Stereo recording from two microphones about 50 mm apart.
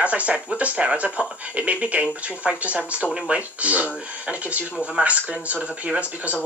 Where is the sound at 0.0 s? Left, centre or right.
Right.